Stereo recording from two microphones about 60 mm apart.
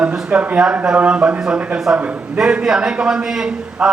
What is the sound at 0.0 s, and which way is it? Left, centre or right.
A man's voice, centre.